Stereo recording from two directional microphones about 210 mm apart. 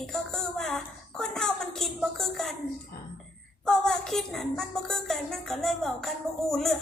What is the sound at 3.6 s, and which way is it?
A woman's voice, 5° left (ahead or behind).